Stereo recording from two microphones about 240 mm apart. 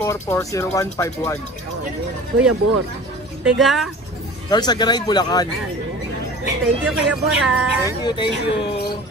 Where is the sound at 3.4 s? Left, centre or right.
Centre.